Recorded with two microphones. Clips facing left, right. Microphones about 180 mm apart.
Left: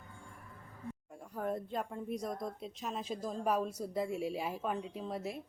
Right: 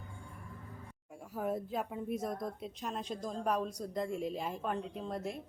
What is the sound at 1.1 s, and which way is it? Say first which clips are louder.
A woman's voice: right 2 dB; 5° right (ahead or behind).